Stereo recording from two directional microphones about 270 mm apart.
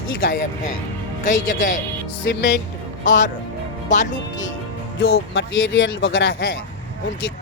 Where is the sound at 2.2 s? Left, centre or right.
Left.